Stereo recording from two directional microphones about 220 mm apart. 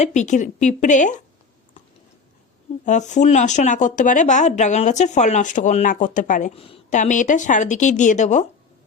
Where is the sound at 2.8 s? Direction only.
35° left (ahead or behind).